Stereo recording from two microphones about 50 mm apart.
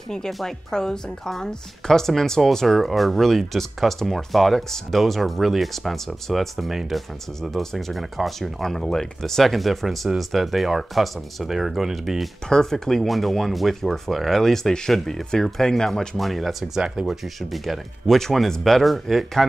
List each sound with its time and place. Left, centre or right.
0.3 s speech: centre
12.4 s speech: centre
16.7 s speech: centre
17.0 s speech: centre